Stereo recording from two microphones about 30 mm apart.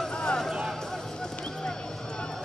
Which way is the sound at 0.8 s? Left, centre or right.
Centre.